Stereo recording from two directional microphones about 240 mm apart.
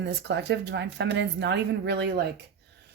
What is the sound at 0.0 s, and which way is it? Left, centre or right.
A woman's voice, right.